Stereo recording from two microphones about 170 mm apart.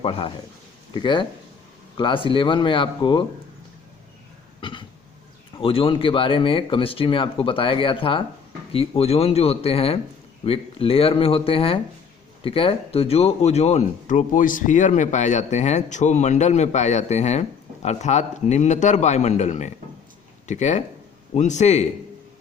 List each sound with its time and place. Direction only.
0.0 s speech: 35° left (ahead or behind)
4.6 s cough: 30° left (ahead or behind)
5.5 s speech: 35° left (ahead or behind)